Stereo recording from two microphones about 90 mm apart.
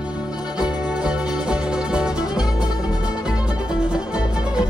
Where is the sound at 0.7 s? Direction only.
10° right (ahead or behind).